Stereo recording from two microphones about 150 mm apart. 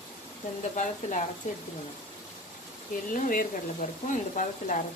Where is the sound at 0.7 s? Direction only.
55° left (ahead or behind).